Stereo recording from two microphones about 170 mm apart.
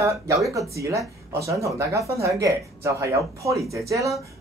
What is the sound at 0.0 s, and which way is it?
Speech, 20° right (ahead or behind).